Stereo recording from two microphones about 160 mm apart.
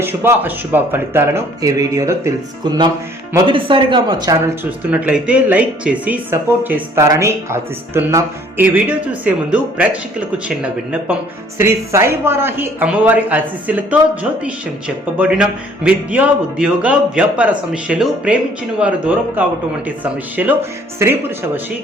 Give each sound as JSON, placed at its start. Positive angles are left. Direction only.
{"t": 0.0, "sound": "speech", "side_deg": -15}
{"t": 2.6, "sound": "music", "side_deg": -30}
{"t": 3.3, "sound": "speech", "side_deg": -30}
{"t": 4.9, "sound": "speech", "side_deg": -10}